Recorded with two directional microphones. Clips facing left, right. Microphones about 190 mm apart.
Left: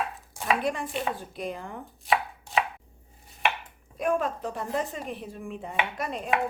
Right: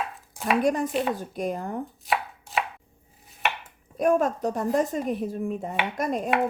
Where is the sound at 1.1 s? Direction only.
45° right (ahead or behind).